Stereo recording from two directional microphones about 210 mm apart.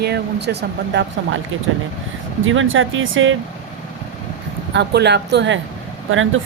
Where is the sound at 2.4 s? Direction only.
70° right (ahead or behind).